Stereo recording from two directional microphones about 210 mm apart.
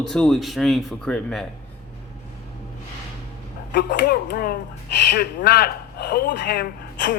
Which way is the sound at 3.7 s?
50° left (ahead or behind).